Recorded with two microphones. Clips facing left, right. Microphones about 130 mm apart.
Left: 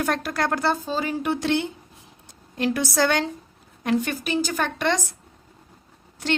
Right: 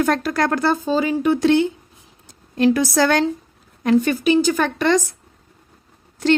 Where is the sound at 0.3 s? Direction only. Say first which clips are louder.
Right 5 dB; 90° right.